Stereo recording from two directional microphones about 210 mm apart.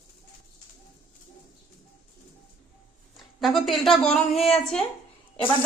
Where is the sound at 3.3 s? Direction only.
Centre (ahead or behind).